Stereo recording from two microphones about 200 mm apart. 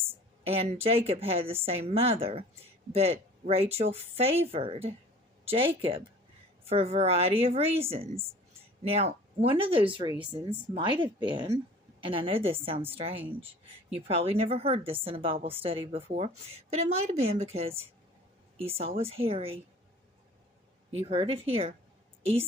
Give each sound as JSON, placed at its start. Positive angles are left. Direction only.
{"t": 0.1, "sound": "a woman's voice", "side_deg": -30}
{"t": 20.9, "sound": "a woman's voice", "side_deg": -25}